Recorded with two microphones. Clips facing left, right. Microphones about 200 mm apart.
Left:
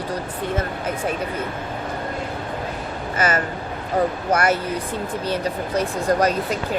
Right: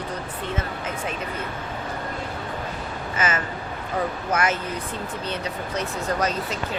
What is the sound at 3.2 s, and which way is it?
Speech, 35° left (ahead or behind).